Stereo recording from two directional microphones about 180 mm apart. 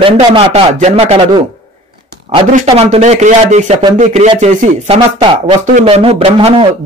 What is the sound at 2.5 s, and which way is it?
Speech, 35° right (ahead or behind).